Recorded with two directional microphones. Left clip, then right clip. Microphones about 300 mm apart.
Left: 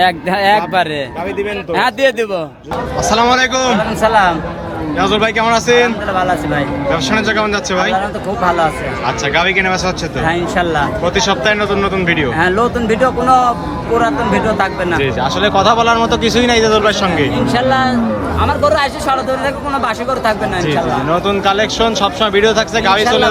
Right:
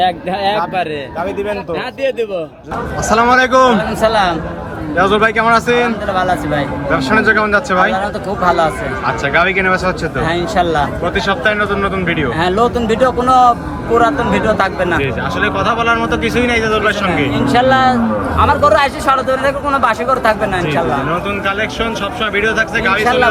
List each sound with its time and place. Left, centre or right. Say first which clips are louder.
0.0 s a man's voice: left 2 dB; left
3.1 s speech: right 2 dB; centre